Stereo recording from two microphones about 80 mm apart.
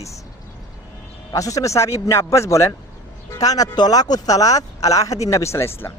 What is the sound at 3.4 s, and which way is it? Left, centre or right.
Speech, left.